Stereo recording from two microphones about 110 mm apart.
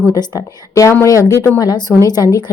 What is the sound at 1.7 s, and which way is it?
Speech, 35° left (ahead or behind).